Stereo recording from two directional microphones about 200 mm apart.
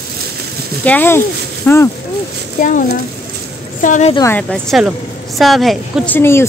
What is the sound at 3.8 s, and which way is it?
Speech, 40° left (ahead or behind).